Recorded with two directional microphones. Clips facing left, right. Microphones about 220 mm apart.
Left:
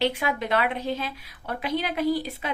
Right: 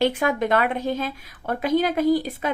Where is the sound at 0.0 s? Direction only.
50° right (ahead or behind).